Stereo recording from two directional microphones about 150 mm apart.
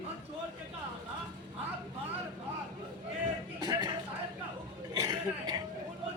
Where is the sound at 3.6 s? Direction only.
25° right (ahead or behind).